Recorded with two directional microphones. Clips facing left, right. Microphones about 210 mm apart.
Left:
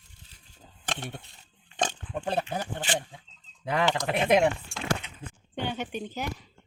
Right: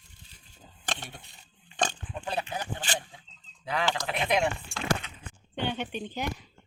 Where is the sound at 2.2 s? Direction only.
50° left (ahead or behind).